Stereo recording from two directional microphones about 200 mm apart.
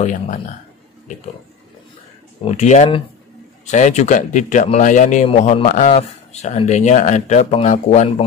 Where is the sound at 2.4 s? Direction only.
35° left (ahead or behind).